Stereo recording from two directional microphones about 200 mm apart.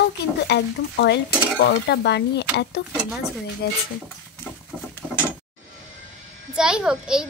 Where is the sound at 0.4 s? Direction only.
55° left (ahead or behind).